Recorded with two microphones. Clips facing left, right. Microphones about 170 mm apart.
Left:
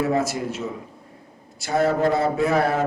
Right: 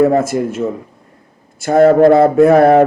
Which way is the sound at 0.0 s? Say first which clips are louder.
Right 10 dB; 50° right (ahead or behind).